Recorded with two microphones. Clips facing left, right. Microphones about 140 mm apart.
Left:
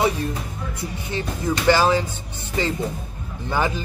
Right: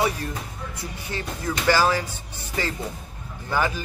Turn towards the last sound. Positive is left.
turn(degrees=20)  # may be behind; listen again after turning